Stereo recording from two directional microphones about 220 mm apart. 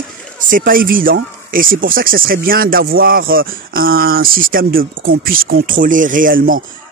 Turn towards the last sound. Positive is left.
turn(degrees=-40)  # may be behind; listen again after turning